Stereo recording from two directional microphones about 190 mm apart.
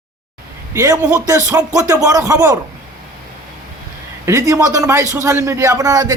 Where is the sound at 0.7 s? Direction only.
15° right (ahead or behind).